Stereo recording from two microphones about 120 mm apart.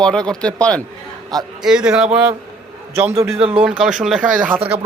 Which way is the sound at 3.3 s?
55° right (ahead or behind).